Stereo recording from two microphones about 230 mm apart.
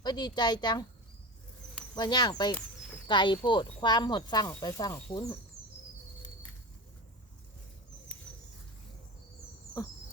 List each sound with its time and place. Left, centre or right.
0.0 s speech: centre
2.0 s speech: centre